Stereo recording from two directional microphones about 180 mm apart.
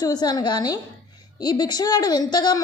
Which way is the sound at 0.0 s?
20° left (ahead or behind).